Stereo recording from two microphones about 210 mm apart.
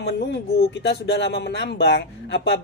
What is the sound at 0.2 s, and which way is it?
Speech, 55° left (ahead or behind).